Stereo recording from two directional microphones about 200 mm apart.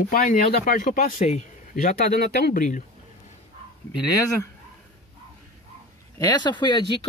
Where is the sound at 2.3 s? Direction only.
55° left (ahead or behind).